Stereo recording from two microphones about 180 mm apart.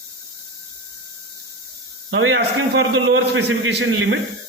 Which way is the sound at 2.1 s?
80° right.